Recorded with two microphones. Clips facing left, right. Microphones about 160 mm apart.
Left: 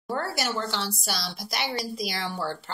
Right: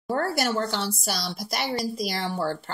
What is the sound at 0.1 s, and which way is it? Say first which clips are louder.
Speech: right 4 dB; 40° right (ahead or behind).